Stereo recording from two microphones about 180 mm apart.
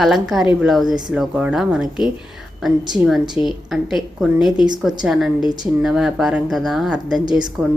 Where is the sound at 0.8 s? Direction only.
25° right (ahead or behind).